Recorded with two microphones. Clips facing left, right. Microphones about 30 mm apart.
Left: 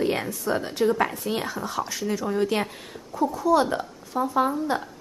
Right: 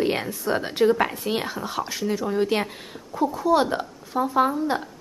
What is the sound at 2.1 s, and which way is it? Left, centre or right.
A woman's voice, centre.